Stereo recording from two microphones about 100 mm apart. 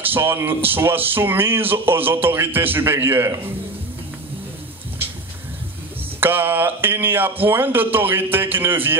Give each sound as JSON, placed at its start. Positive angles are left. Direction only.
{"t": 0.0, "sound": "speech", "side_deg": -20}
{"t": 6.2, "sound": "speech", "side_deg": -20}